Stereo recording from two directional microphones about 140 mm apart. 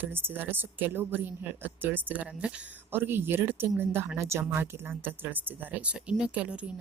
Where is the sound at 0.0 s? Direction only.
15° right (ahead or behind).